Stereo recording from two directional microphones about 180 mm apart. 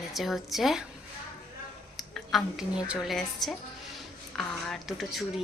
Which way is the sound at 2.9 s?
Centre (ahead or behind).